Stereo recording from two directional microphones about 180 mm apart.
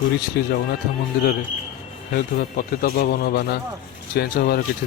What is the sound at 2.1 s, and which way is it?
A man's voice, 55° left (ahead or behind).